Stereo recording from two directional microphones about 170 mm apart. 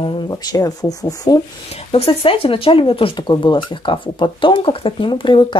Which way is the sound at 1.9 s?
35° left (ahead or behind).